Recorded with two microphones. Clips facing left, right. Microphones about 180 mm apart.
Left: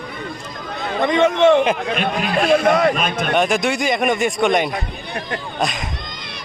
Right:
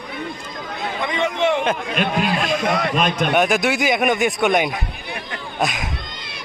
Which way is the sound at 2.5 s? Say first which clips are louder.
Left 6 dB; 45° left (ahead or behind).